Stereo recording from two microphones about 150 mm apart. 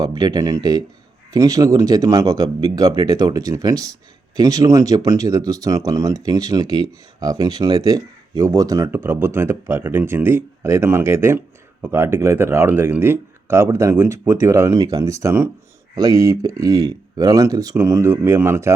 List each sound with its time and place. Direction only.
0.0 s speech: 25° right (ahead or behind)